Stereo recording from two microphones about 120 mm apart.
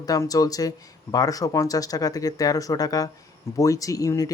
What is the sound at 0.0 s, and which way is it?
Speech, 30° left (ahead or behind).